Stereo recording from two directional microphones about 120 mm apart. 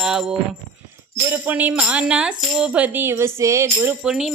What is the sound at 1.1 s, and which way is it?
Music, 15° right (ahead or behind).